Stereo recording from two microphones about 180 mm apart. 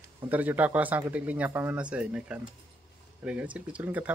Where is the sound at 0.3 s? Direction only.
10° right (ahead or behind).